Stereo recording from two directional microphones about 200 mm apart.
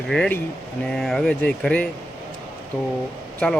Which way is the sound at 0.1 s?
5° left (ahead or behind).